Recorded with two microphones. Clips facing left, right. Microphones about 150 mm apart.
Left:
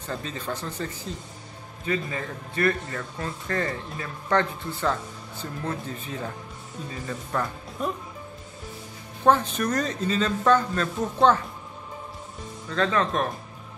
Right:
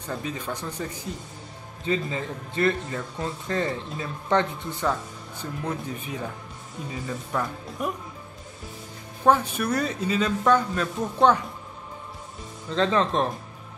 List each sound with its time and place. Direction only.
0.0 s a man's voice: 10° right (ahead or behind)
9.2 s speech: 10° right (ahead or behind)
12.6 s a man's voice: 25° right (ahead or behind)